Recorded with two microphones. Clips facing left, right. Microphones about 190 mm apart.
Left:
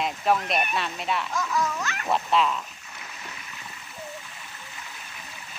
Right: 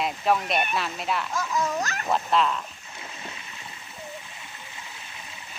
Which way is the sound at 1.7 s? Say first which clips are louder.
Right 3 dB; 40° right (ahead or behind).